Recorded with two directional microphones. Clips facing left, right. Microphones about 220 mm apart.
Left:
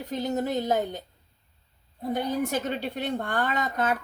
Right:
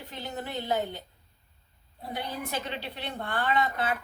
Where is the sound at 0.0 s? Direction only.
45° left (ahead or behind).